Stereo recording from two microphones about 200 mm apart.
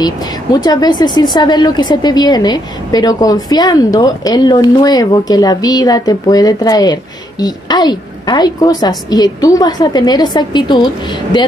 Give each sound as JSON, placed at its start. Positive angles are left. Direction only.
{"t": 0.0, "sound": "speech", "side_deg": 20}